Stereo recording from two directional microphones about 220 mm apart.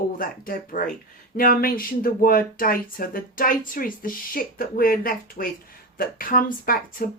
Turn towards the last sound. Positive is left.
turn(degrees=40)  # may be behind; listen again after turning